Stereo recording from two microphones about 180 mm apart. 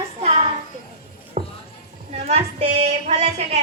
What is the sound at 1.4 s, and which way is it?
Music, 40° right (ahead or behind).